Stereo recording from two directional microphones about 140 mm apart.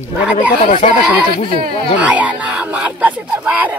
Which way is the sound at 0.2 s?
10° right (ahead or behind).